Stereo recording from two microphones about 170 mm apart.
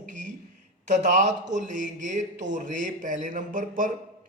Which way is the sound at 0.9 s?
45° right (ahead or behind).